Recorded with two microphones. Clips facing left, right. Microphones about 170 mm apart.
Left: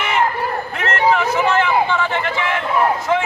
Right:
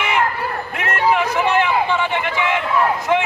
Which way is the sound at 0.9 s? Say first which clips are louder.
Left 1 dB; 15° right (ahead or behind).